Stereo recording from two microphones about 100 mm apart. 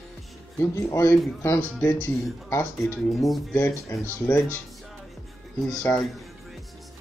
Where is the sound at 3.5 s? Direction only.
25° left (ahead or behind).